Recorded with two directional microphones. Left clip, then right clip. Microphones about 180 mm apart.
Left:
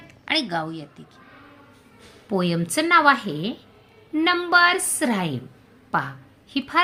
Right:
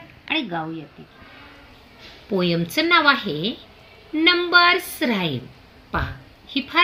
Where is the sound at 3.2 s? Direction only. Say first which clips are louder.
Right 4 dB; 35° left (ahead or behind).